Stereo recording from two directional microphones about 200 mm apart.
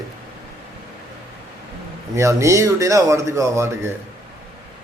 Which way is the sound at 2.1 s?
15° right (ahead or behind).